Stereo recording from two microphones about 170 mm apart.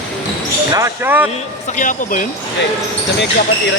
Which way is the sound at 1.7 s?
50° left (ahead or behind).